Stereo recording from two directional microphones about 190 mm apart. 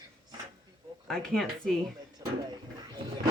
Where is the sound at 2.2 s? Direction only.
20° right (ahead or behind).